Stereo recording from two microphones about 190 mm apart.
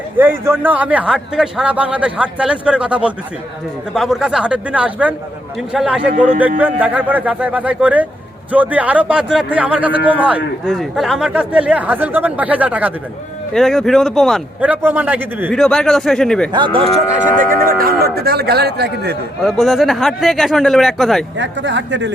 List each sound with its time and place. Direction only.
0.2 s a man's voice: 10° right (ahead or behind)
15.4 s speech: 5° left (ahead or behind)
16.5 s speech: 25° right (ahead or behind)
17.7 s speech: 50° right (ahead or behind)
19.4 s speech: centre (ahead or behind)
21.3 s speech: 70° right (ahead or behind)